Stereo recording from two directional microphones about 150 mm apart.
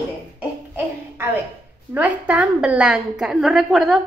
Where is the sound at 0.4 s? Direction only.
15° right (ahead or behind).